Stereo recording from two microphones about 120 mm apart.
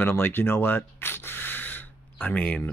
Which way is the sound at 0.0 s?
20° left (ahead or behind).